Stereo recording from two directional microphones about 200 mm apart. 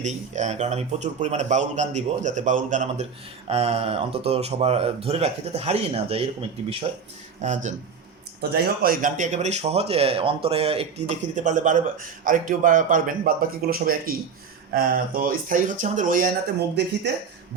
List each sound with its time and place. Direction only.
0.0 s speech: 35° right (ahead or behind)
8.4 s speech: 50° right (ahead or behind)